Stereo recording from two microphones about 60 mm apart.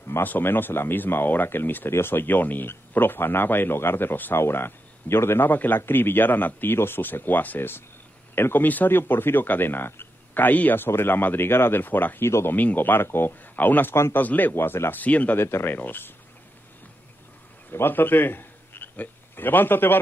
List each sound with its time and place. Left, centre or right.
0.2 s speech: left
12.3 s speech: left
12.5 s speech: left
15.3 s speech: left
17.6 s a man's voice: left